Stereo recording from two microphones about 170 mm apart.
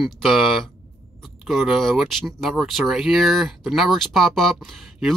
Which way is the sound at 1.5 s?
Centre (ahead or behind).